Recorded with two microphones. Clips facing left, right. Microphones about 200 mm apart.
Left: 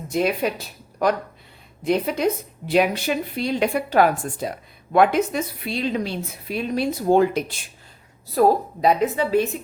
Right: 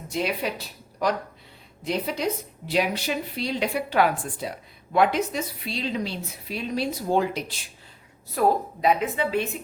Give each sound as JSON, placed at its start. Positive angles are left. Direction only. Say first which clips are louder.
{"t": 0.1, "sound": "a woman's voice", "louder": "left 6 dB", "side_deg": 50}
{"t": 1.8, "sound": "a woman's voice", "louder": "left 6 dB", "side_deg": 55}
{"t": 8.4, "sound": "a woman's voice", "louder": "left 5 dB", "side_deg": 35}